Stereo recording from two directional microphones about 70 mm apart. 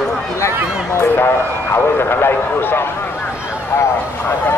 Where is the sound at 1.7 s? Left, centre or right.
Left.